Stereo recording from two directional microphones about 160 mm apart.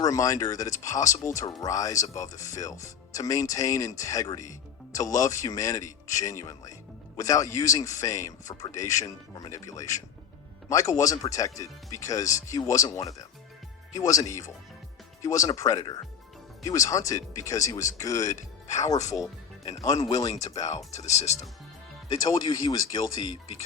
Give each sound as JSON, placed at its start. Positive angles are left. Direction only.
{"t": 0.0, "sound": "speech", "side_deg": 20}
{"t": 18.2, "sound": "speech", "side_deg": 50}
{"t": 20.1, "sound": "speech", "side_deg": 20}
{"t": 20.3, "sound": "speech", "side_deg": 45}
{"t": 22.3, "sound": "speech", "side_deg": 25}